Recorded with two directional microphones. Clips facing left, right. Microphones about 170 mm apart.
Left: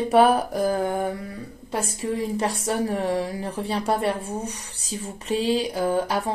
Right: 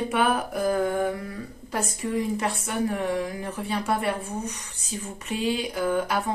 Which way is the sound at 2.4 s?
30° left (ahead or behind).